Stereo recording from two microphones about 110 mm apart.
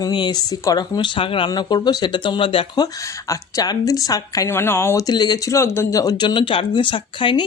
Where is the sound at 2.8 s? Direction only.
30° left (ahead or behind).